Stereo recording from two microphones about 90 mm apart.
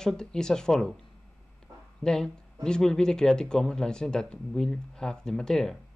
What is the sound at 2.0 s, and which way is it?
Speech, 5° left (ahead or behind).